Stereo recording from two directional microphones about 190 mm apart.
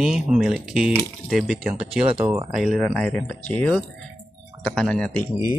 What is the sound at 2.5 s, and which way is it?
Speech, centre (ahead or behind).